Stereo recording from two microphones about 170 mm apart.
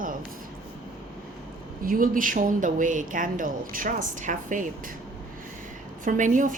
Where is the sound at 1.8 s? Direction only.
55° right (ahead or behind).